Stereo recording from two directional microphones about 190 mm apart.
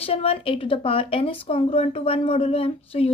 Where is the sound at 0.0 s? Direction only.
30° left (ahead or behind).